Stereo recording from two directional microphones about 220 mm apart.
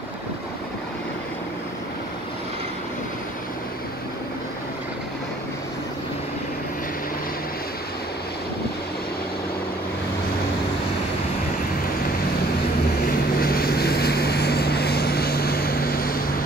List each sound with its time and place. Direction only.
13.4 s vehicle: 45° left (ahead or behind)